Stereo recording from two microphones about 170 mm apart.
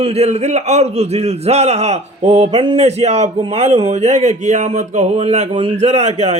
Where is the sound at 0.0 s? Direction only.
40° right (ahead or behind).